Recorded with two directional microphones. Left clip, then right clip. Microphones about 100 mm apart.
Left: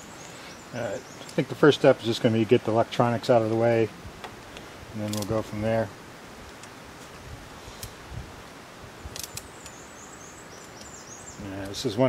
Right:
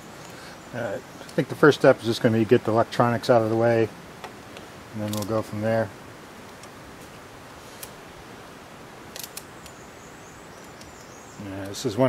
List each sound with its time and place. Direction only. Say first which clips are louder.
0.7 s speech: right 2 dB; 15° right (ahead or behind)
5.0 s speech: right 2 dB; 5° right (ahead or behind)
5.3 s speech: right 2 dB; 15° right (ahead or behind)
11.7 s speech: right 2 dB; 20° right (ahead or behind)